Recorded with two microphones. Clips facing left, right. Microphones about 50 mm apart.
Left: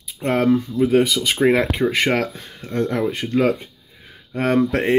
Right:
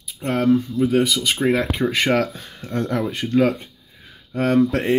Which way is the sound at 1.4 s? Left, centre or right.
Left.